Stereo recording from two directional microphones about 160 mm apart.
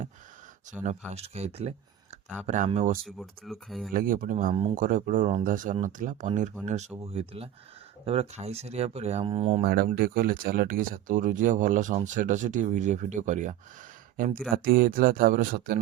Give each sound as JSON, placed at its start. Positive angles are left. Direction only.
{"t": 0.7, "sound": "speech", "side_deg": -45}
{"t": 3.2, "sound": "speech", "side_deg": 0}
{"t": 3.9, "sound": "speech", "side_deg": -60}
{"t": 9.6, "sound": "speech", "side_deg": -65}
{"t": 14.5, "sound": "speech", "side_deg": -65}